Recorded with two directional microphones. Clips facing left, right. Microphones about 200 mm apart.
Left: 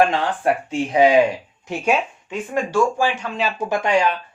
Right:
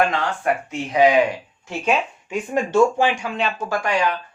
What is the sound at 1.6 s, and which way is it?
Speech, 15° left (ahead or behind).